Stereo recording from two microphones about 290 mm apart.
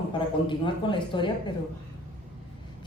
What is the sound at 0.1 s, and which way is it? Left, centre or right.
A man's voice, centre.